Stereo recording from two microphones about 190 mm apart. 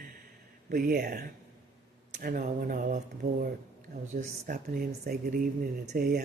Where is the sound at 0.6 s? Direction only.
50° right (ahead or behind).